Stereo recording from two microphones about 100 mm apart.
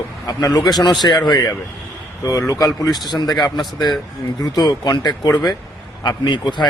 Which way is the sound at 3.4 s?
45° left (ahead or behind).